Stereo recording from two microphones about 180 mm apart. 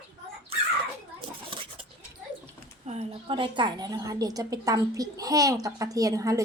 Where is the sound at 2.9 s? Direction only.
35° right (ahead or behind).